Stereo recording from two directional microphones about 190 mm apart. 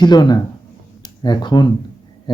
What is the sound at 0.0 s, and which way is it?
Speech, 20° left (ahead or behind).